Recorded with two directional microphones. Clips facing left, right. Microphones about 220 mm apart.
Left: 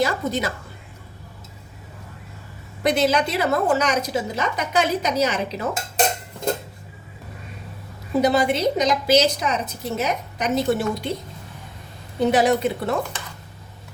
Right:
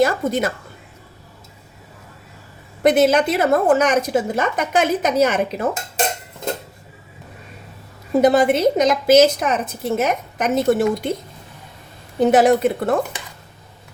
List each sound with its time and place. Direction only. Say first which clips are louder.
0.0 s a woman's voice: right 5 dB; 50° right (ahead or behind)
2.8 s a woman's voice: right 5 dB; 50° right (ahead or behind)
8.2 s a woman's voice: right 5 dB; 50° right (ahead or behind)
12.3 s a woman's voice: right 5 dB; 50° right (ahead or behind)